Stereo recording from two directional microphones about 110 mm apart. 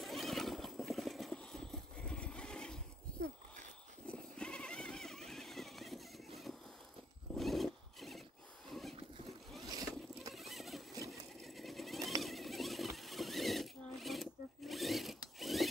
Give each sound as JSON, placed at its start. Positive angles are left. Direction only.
{"t": 0.0, "sound": "a sound", "side_deg": 0}
{"t": 4.1, "sound": "vehicle", "side_deg": 10}
{"t": 7.3, "sound": "zipper", "side_deg": 0}
{"t": 8.6, "sound": "a sound", "side_deg": 0}
{"t": 9.7, "sound": "boat", "side_deg": -35}
{"t": 10.3, "sound": "vehicle", "side_deg": 0}
{"t": 11.1, "sound": "sewing machine", "side_deg": 0}